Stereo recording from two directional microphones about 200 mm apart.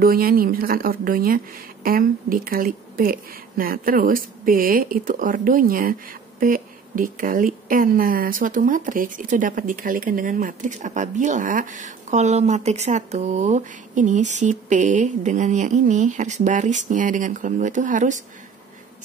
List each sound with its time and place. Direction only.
0.0 s a woman's voice: 45° right (ahead or behind)